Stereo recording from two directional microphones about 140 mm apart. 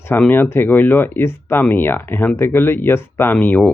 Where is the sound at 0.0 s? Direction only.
15° left (ahead or behind).